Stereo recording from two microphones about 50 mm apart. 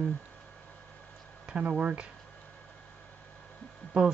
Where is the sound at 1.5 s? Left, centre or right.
Right.